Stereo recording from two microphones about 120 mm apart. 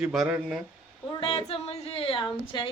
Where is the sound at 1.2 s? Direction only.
50° left (ahead or behind).